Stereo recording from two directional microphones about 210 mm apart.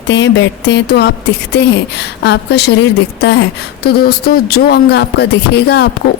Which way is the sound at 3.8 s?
50° left (ahead or behind).